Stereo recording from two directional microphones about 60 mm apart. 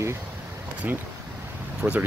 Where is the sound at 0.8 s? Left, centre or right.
Right.